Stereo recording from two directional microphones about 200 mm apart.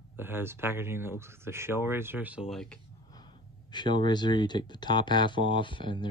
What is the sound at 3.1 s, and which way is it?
Speech, 20° left (ahead or behind).